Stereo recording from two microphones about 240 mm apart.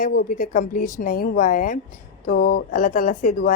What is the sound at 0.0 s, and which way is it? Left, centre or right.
A woman's voice, left.